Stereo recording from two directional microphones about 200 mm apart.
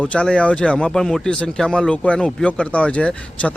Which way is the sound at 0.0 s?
5° left (ahead or behind).